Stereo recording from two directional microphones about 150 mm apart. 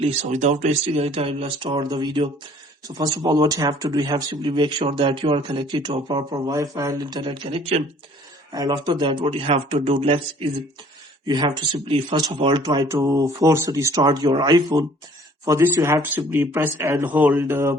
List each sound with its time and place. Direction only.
0.0 s speech: 50° right (ahead or behind)
8.5 s speech: 25° right (ahead or behind)
15.4 s speech: 15° right (ahead or behind)